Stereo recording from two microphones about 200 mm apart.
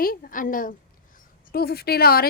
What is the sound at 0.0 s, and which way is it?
A woman's voice, 45° left (ahead or behind).